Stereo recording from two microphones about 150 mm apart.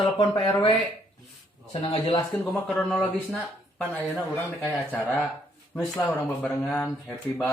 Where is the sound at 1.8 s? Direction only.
30° left (ahead or behind).